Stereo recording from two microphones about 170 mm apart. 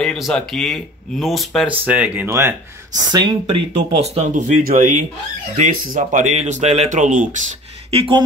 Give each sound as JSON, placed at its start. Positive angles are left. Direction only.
{"t": 0.0, "sound": "speech", "side_deg": 5}
{"t": 3.1, "sound": "speech", "side_deg": -25}
{"t": 3.7, "sound": "speech", "side_deg": -40}
{"t": 7.9, "sound": "speech", "side_deg": -35}